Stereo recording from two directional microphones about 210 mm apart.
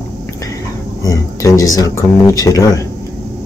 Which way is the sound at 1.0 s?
15° left (ahead or behind).